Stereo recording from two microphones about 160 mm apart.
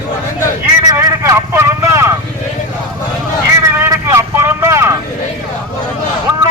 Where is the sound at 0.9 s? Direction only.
20° right (ahead or behind).